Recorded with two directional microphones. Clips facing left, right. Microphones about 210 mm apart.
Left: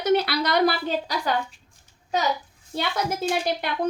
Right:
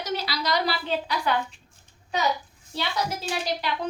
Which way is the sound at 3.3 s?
50° left (ahead or behind).